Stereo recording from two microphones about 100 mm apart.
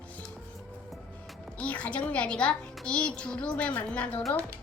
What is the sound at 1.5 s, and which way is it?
A woman's voice, 15° left (ahead or behind).